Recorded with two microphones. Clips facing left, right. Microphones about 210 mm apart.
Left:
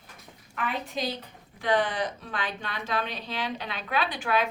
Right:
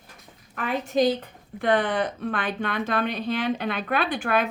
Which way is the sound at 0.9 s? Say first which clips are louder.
Right 11 dB; 50° right (ahead or behind).